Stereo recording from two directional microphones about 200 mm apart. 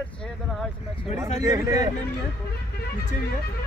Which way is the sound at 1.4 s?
15° right (ahead or behind).